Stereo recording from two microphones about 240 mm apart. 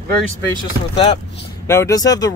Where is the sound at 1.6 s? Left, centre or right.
Centre.